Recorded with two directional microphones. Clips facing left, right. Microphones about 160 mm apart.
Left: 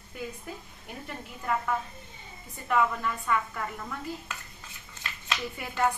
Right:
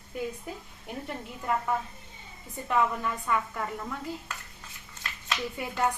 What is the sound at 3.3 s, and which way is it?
Speech, 5° right (ahead or behind).